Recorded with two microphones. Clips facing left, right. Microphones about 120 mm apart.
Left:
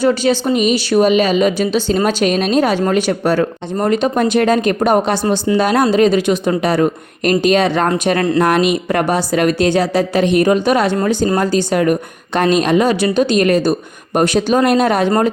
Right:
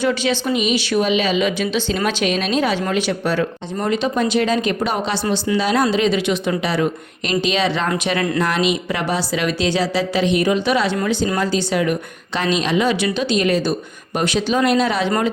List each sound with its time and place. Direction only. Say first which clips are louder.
0.0 s speech: left 5 dB; 40° left (ahead or behind)